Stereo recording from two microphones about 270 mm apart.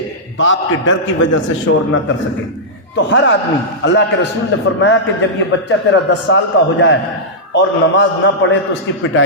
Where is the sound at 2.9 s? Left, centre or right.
Left.